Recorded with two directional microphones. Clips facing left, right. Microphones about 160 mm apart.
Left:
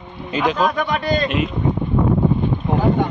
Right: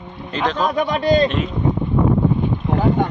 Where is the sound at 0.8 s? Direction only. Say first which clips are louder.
Right 4 dB; 30° right (ahead or behind).